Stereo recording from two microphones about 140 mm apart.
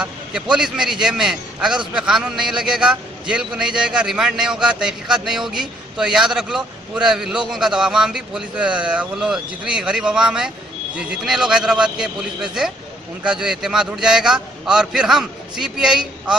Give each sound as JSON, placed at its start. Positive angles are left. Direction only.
{"t": 0.0, "sound": "a man's voice", "side_deg": -5}